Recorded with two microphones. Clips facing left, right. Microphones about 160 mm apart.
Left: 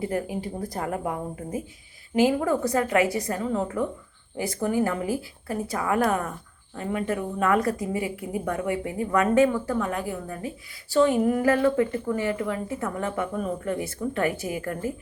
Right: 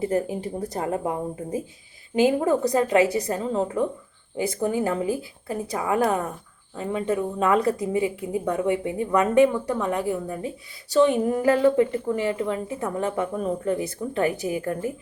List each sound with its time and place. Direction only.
0.0 s a woman's voice: 25° right (ahead or behind)